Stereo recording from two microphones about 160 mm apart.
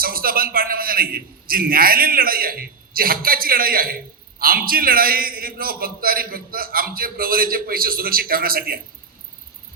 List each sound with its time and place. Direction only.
0.0 s a man's voice: 65° right (ahead or behind)